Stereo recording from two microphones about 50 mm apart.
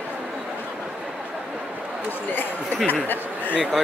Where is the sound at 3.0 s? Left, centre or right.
Left.